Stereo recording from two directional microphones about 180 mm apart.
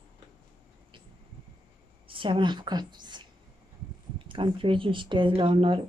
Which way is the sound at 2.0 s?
30° right (ahead or behind).